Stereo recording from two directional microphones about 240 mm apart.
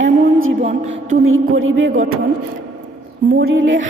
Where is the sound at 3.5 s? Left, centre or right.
Right.